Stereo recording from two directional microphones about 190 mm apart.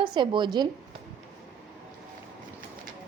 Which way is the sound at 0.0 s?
25° right (ahead or behind).